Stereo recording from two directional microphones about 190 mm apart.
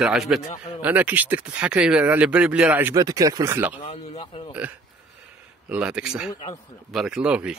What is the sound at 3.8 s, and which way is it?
Speech, 35° left (ahead or behind).